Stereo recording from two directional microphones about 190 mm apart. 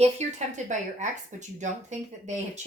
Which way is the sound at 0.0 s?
35° right (ahead or behind).